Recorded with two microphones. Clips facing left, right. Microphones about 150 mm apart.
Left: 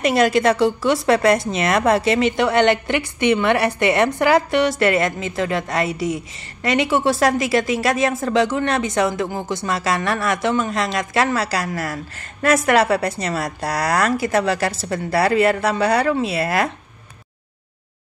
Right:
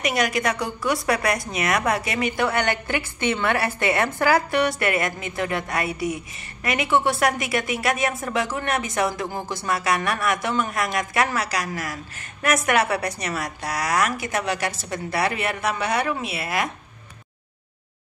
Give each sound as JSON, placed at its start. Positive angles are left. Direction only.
{"t": 0.0, "sound": "speech", "side_deg": 30}